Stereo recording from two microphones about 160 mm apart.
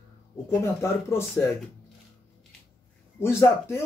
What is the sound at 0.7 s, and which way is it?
Speech, 15° left (ahead or behind).